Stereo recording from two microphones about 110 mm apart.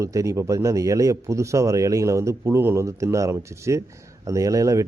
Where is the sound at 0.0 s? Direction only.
30° right (ahead or behind).